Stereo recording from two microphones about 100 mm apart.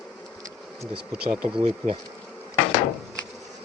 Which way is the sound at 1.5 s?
90° right.